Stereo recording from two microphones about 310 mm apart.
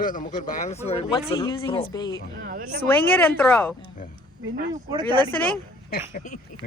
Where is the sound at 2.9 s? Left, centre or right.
Centre.